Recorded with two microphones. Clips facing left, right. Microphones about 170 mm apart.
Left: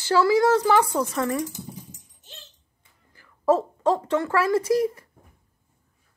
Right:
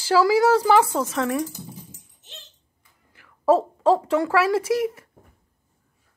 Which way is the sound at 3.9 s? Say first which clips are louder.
Right 5 dB; 10° right (ahead or behind).